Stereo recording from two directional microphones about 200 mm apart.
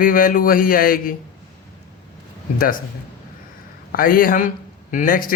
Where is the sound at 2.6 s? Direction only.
45° left (ahead or behind).